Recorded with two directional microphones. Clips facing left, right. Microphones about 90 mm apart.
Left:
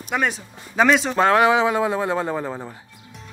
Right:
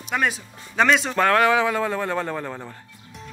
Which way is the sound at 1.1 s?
20° left (ahead or behind).